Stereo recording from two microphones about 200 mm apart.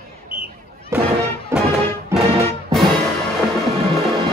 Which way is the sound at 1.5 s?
15° right (ahead or behind).